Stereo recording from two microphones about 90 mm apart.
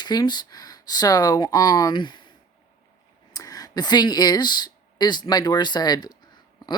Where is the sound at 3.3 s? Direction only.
40° left (ahead or behind).